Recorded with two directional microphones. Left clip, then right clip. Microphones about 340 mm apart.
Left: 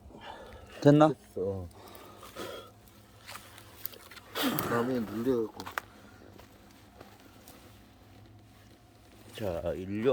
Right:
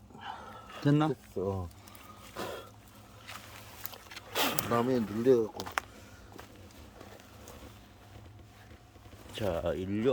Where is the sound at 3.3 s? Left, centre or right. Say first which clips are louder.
Even; centre.